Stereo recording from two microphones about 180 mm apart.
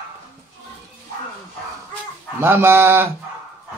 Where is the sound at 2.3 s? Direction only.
10° right (ahead or behind).